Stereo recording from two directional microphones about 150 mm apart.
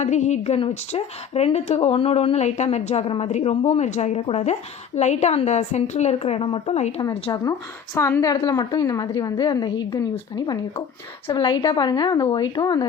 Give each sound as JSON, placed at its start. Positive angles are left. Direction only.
{"t": 0.0, "sound": "speech", "side_deg": 50}
{"t": 7.3, "sound": "a woman's voice", "side_deg": 25}